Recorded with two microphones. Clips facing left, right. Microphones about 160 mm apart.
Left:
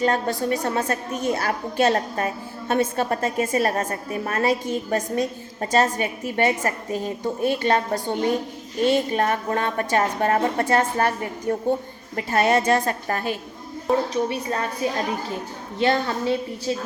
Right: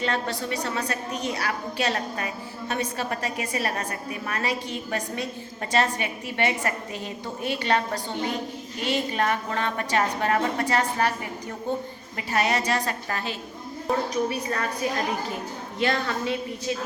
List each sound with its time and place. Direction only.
0.0 s a woman's voice: 45° left (ahead or behind)
14.1 s a woman's voice: 25° left (ahead or behind)